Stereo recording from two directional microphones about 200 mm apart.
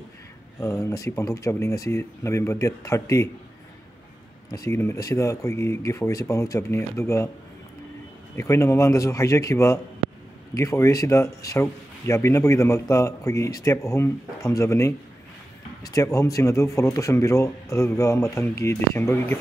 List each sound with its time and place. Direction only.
0.6 s speech: 15° left (ahead or behind)
4.5 s speech: 15° left (ahead or behind)
8.4 s speech: 15° left (ahead or behind)